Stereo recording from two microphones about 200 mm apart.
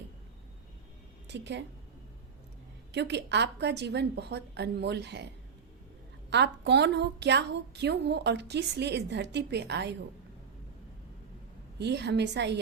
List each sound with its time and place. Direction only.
1.3 s a woman's voice: 60° right (ahead or behind)
2.9 s a woman's voice: 60° right (ahead or behind)
6.3 s a woman's voice: 60° right (ahead or behind)
11.8 s a woman's voice: 60° right (ahead or behind)